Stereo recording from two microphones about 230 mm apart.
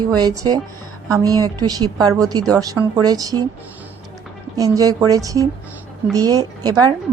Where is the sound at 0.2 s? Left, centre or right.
Centre.